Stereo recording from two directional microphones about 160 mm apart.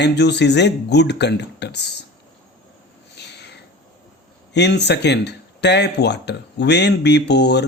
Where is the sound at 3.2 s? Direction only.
90° left.